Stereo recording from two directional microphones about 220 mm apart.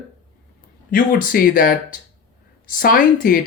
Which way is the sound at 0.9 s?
40° left (ahead or behind).